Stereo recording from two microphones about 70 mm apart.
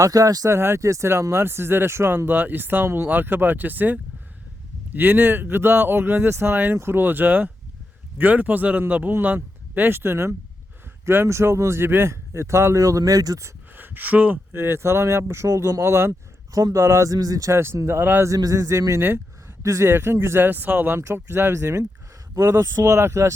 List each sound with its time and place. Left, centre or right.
0.0 s speech: right
0.5 s speech: right
13.7 s speech: right
14.5 s speech: right
17.7 s speech: right
18.3 s speech: right
19.9 s speech: right
21.0 s speech: right